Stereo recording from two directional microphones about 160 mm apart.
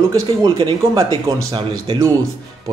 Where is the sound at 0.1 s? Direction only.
30° right (ahead or behind).